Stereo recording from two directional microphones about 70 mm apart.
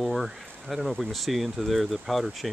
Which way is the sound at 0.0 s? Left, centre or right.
Centre.